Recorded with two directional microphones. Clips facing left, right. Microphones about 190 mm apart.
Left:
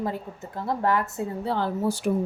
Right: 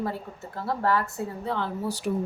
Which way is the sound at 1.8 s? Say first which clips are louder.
Left 6 dB; 50° left (ahead or behind).